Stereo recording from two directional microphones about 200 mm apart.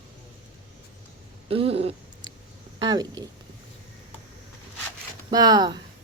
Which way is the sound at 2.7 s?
20° right (ahead or behind).